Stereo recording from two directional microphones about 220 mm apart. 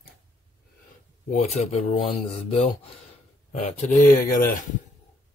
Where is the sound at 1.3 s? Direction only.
30° left (ahead or behind).